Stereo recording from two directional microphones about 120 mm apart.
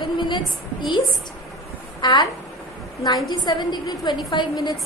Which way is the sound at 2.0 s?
35° left (ahead or behind).